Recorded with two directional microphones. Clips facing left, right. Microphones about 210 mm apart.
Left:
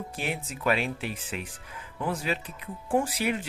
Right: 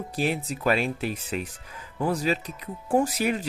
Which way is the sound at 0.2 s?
35° right (ahead or behind).